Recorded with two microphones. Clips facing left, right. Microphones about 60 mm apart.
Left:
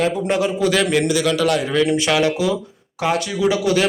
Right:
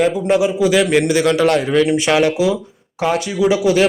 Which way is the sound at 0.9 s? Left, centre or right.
Right.